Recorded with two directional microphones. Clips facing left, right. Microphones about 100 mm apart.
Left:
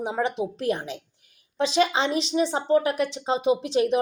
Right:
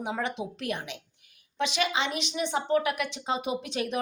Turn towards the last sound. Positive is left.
turn(degrees=30)  # may be behind; listen again after turning